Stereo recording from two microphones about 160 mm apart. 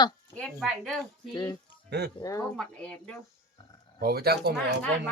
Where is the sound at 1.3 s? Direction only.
25° left (ahead or behind).